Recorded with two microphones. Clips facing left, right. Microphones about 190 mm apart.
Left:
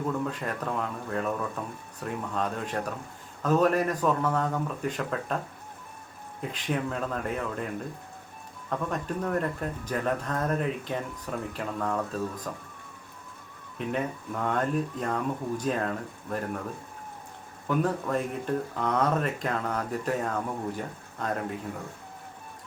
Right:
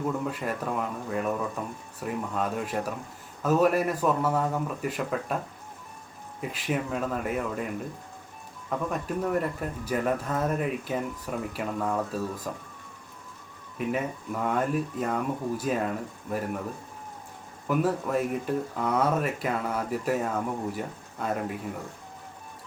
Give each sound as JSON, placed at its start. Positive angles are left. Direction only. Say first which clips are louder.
{"t": 0.3, "sound": "speech", "louder": "right 1 dB", "side_deg": -5}
{"t": 6.4, "sound": "speech", "louder": "even", "side_deg": -5}
{"t": 8.7, "sound": "speech", "louder": "right 1 dB", "side_deg": -5}
{"t": 13.7, "sound": "speech", "louder": "right 1 dB", "side_deg": -5}
{"t": 17.7, "sound": "speech", "louder": "right 1 dB", "side_deg": -5}